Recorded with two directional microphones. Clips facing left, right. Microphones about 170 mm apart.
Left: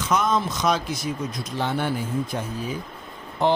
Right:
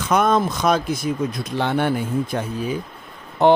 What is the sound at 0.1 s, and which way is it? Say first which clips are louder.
Speech: right 5 dB; 60° right (ahead or behind).